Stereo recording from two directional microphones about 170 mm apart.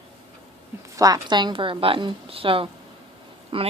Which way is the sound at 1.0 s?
20° right (ahead or behind).